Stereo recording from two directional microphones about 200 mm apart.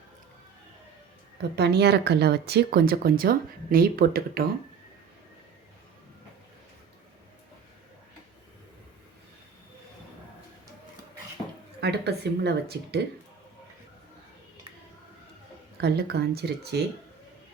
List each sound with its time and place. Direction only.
1.4 s speech: 55° right (ahead or behind)
11.8 s speech: 55° right (ahead or behind)
15.8 s speech: 55° right (ahead or behind)